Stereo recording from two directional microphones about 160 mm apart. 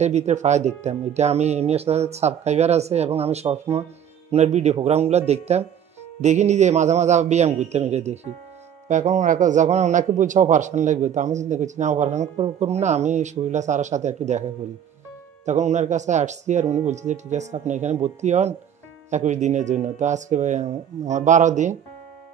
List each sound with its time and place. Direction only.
0.0 s a man's voice: 45° right (ahead or behind)
15.4 s a man's voice: 45° right (ahead or behind)